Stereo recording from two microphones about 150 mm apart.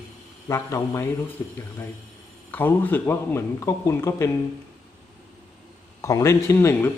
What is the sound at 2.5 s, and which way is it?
Speech, 15° left (ahead or behind).